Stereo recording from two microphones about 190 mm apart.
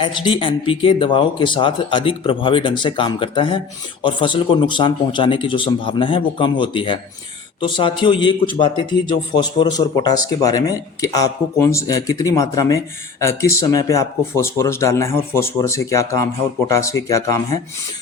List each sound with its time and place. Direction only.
0.0 s a man's voice: 25° left (ahead or behind)